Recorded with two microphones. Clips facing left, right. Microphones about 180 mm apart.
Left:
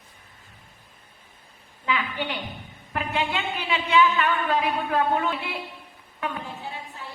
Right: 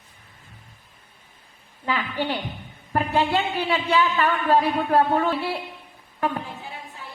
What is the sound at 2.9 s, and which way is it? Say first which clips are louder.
A woman's voice: right 6 dB; 35° right (ahead or behind).